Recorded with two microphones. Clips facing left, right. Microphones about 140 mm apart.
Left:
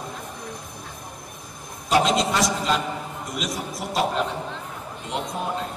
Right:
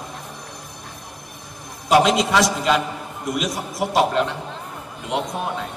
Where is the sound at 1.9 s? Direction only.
75° right (ahead or behind).